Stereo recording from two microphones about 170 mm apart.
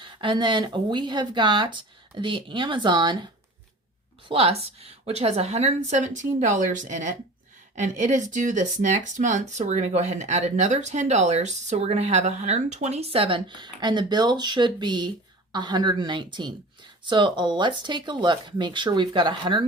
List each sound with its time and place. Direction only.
0.0 s speech: 30° right (ahead or behind)
4.3 s a woman's voice: 35° right (ahead or behind)